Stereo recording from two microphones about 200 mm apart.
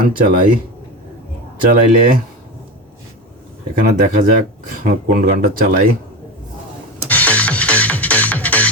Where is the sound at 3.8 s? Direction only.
45° right (ahead or behind).